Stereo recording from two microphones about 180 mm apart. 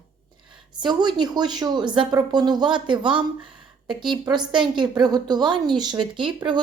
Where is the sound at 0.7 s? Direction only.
25° right (ahead or behind).